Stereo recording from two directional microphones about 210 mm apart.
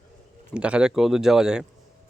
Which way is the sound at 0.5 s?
5° right (ahead or behind).